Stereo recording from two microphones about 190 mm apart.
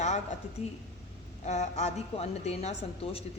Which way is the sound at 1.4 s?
35° left (ahead or behind).